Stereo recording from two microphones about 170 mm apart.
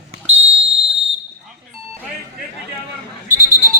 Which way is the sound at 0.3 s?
35° right (ahead or behind).